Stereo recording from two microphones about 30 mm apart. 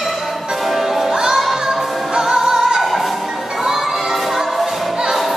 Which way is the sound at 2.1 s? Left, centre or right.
Centre.